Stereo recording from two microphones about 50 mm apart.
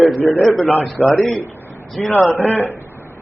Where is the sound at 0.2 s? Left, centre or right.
Left.